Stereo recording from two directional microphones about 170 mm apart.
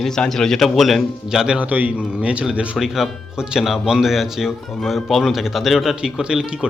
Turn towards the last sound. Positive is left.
turn(degrees=-5)  # may be behind; listen again after turning